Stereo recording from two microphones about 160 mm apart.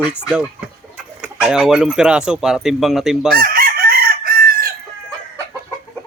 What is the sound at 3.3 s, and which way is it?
Chicken, 70° right (ahead or behind).